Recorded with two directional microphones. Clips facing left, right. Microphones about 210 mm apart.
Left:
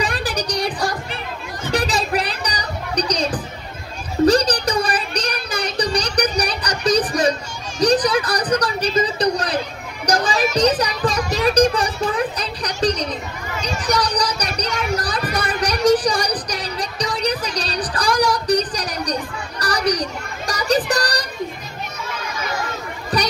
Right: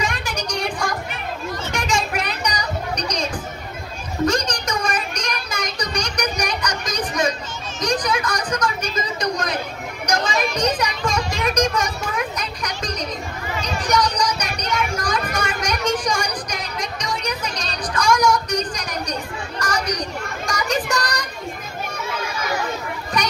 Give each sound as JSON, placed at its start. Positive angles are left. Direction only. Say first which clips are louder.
{"t": 0.0, "sound": "a sound", "louder": "left 3 dB", "side_deg": 35}
{"t": 10.0, "sound": "children playing", "louder": "left 3 dB", "side_deg": 35}
{"t": 10.8, "sound": "a sound", "louder": "left 2 dB", "side_deg": 35}
{"t": 15.3, "sound": "music", "louder": "left 3 dB", "side_deg": 35}
{"t": 19.6, "sound": "children playing", "louder": "left 4 dB", "side_deg": 35}
{"t": 23.2, "sound": "children playing", "louder": "left 2 dB", "side_deg": 35}